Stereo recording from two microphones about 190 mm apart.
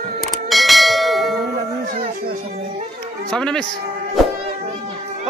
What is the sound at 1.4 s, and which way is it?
Music, 50° right (ahead or behind).